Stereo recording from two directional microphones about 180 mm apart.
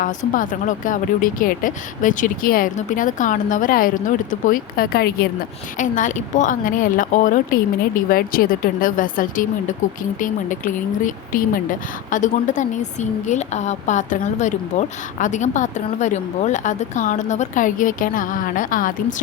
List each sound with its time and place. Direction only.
0.0 s a woman's voice: 50° left (ahead or behind)
5.7 s a woman's voice: 45° left (ahead or behind)